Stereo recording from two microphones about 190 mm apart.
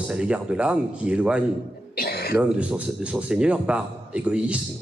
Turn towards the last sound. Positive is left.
turn(degrees=-5)  # may be behind; listen again after turning